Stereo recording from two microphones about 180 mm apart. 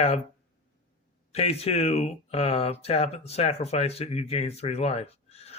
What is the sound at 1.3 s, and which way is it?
Speech, 35° left (ahead or behind).